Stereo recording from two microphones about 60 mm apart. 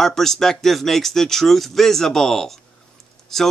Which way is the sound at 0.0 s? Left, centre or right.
Centre.